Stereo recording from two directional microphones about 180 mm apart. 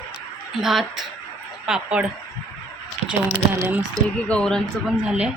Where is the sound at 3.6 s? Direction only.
15° right (ahead or behind).